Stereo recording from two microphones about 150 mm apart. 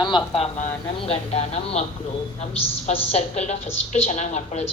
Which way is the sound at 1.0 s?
45° left (ahead or behind).